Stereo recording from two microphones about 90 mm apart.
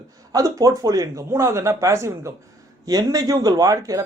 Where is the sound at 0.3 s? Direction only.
40° right (ahead or behind).